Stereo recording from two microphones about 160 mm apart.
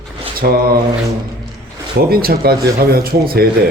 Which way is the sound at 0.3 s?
65° right (ahead or behind).